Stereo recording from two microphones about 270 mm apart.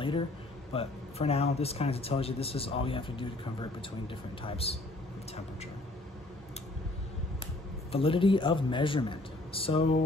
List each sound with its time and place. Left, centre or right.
0.7 s speech: left
7.9 s speech: centre